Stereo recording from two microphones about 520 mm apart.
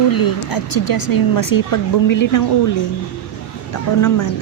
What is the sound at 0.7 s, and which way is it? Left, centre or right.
A woman's voice, left.